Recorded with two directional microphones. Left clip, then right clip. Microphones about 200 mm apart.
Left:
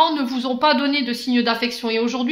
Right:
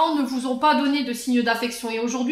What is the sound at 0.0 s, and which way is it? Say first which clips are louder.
Speech: left 3 dB; 30° left (ahead or behind).